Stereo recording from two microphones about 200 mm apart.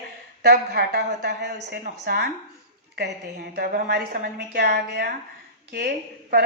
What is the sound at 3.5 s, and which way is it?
A woman's voice, 55° right (ahead or behind).